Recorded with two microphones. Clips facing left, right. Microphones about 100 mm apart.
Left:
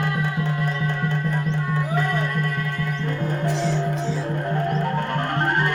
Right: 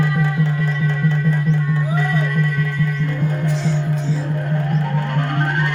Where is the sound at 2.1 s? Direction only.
40° left (ahead or behind).